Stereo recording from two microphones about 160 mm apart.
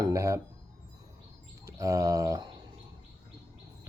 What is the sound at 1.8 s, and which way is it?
Speech, 20° right (ahead or behind).